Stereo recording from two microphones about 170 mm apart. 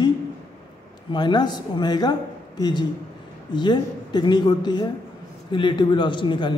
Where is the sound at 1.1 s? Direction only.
25° left (ahead or behind).